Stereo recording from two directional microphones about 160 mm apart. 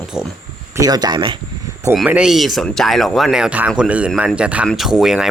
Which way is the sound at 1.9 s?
5° right (ahead or behind).